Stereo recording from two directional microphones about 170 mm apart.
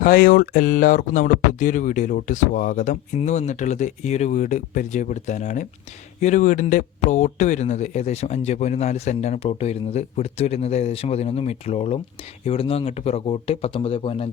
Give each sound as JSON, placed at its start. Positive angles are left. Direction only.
{"t": 0.0, "sound": "speech", "side_deg": 55}